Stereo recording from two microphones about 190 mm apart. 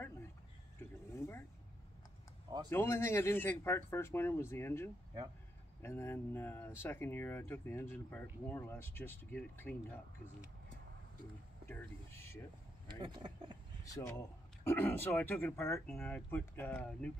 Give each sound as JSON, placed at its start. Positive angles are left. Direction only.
{"t": 1.1, "sound": "speech", "side_deg": 15}
{"t": 2.7, "sound": "speech", "side_deg": 15}
{"t": 11.6, "sound": "speech", "side_deg": 10}
{"t": 12.8, "sound": "speech", "side_deg": -25}
{"t": 14.6, "sound": "speech", "side_deg": 10}